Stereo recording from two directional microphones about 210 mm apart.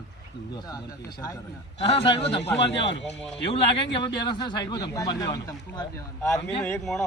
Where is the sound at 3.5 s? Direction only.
25° left (ahead or behind).